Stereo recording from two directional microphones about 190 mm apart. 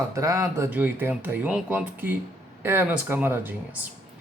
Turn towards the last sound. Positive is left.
turn(degrees=-10)  # may be behind; listen again after turning